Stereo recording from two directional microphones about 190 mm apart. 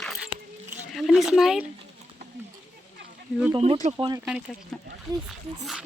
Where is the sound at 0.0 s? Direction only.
Centre (ahead or behind).